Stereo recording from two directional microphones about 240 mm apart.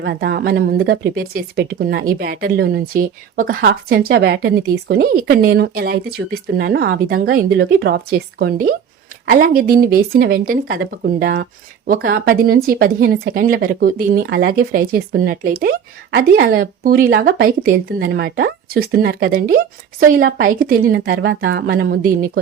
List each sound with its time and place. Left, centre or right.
0.0 s speech: right